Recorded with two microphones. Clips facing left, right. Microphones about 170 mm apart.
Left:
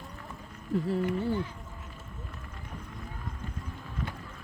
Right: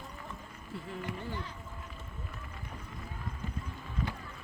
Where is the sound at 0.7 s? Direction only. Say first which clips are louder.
Left 13 dB; 40° left (ahead or behind).